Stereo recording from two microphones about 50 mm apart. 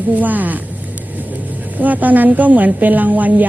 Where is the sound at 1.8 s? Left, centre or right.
Right.